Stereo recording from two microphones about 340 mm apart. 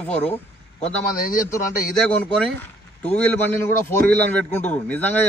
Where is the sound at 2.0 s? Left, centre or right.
Centre.